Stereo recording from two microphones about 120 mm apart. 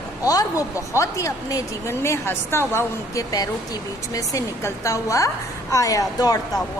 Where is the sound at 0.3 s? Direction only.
30° left (ahead or behind).